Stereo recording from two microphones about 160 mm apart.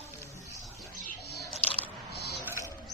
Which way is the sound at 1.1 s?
90° left.